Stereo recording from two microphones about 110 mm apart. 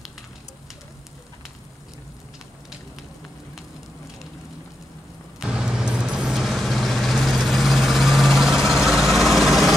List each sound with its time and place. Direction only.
5.4 s vehicle: 5° right (ahead or behind)